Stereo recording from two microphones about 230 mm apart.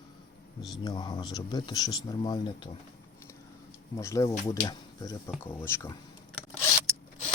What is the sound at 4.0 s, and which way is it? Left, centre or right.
Speech, centre.